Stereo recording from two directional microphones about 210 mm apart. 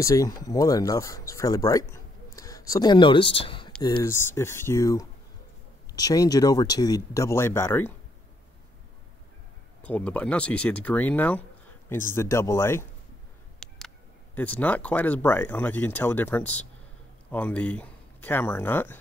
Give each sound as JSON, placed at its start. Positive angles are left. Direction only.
{"t": 0.0, "sound": "speech", "side_deg": 15}
{"t": 9.8, "sound": "speech", "side_deg": 5}
{"t": 13.6, "sound": "speech", "side_deg": 0}